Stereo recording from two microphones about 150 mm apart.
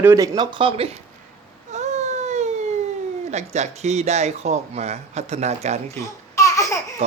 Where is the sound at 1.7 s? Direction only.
50° right (ahead or behind).